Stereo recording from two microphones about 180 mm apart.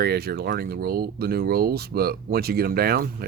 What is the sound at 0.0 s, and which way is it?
Speech, 60° right (ahead or behind).